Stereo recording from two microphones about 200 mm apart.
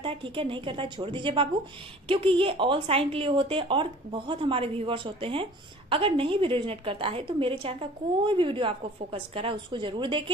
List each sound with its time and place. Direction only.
0.0 s a woman's voice: 25° right (ahead or behind)